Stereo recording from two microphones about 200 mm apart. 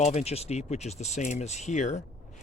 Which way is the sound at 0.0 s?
35° left (ahead or behind).